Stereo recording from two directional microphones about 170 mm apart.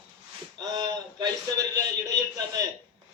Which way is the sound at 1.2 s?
20° right (ahead or behind).